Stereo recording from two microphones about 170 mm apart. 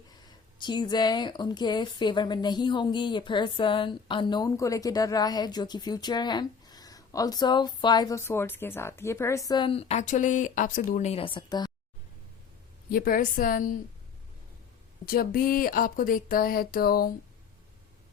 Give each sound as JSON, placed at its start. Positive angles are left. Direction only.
{"t": 0.6, "sound": "a woman's voice", "side_deg": 25}
{"t": 12.9, "sound": "speech", "side_deg": 55}
{"t": 15.0, "sound": "speech", "side_deg": 60}